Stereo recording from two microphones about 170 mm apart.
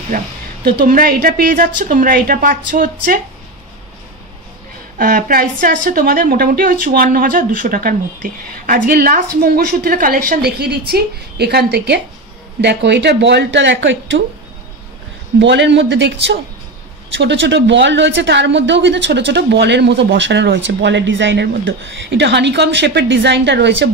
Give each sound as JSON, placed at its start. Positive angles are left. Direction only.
{"t": 0.1, "sound": "a woman's voice", "side_deg": -50}
{"t": 4.9, "sound": "a woman's voice", "side_deg": -55}
{"t": 12.6, "sound": "speech", "side_deg": -85}
{"t": 15.3, "sound": "speech", "side_deg": -90}